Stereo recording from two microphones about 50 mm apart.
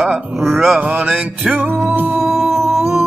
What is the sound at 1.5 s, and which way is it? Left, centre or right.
Music, right.